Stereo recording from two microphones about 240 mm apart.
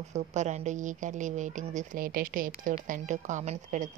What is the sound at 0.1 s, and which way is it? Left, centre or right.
Speech, right.